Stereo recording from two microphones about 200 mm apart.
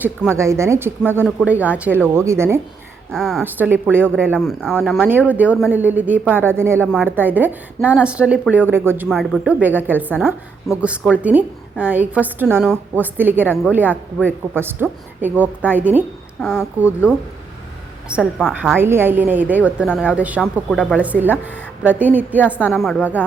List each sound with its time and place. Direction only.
0.3 s a woman's voice: 15° right (ahead or behind)
3.1 s a woman's voice: centre (ahead or behind)
3.4 s a woman's voice: 10° right (ahead or behind)
18.8 s a woman's voice: 10° right (ahead or behind)
22.5 s a woman's voice: 5° left (ahead or behind)